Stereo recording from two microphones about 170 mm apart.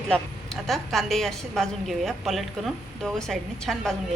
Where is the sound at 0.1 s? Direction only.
Centre (ahead or behind).